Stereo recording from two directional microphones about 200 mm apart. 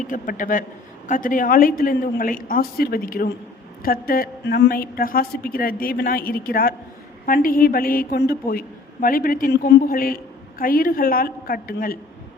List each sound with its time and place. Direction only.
0.1 s a man's voice: 40° left (ahead or behind)